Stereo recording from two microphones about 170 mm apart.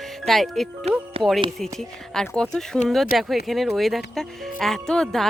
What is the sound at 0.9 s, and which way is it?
Speech, 35° right (ahead or behind).